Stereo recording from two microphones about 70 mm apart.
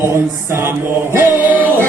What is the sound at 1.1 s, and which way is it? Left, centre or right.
Music, right.